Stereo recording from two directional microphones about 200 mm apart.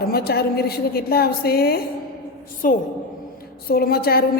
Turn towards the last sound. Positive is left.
turn(degrees=50)  # may be behind; listen again after turning